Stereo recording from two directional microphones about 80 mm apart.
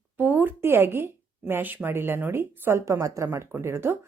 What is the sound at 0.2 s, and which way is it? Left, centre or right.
A woman's voice, right.